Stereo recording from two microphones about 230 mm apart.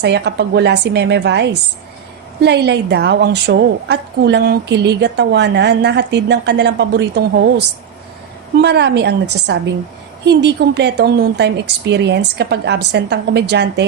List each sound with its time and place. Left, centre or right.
0.0 s a woman's voice: right
8.5 s a woman's voice: right
10.2 s a woman's voice: right